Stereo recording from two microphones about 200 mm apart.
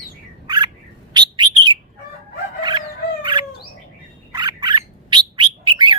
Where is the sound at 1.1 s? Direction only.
20° right (ahead or behind).